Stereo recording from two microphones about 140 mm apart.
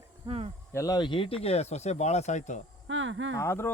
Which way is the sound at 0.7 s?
25° left (ahead or behind).